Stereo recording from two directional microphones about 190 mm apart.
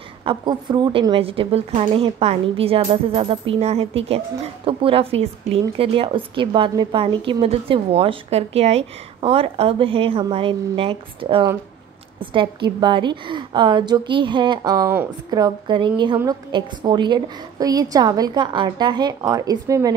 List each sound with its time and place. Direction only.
0.2 s a woman's voice: 25° right (ahead or behind)